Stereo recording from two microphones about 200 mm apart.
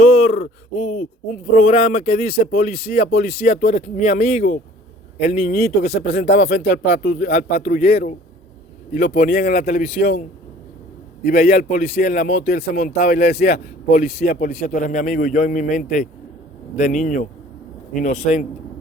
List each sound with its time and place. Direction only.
0.1 s speech: 35° left (ahead or behind)
2.9 s speech: 55° left (ahead or behind); by 5.5 s 30° left (ahead or behind)
5.5 s speech: 55° left (ahead or behind)
7.3 s a man's voice: 30° left (ahead or behind)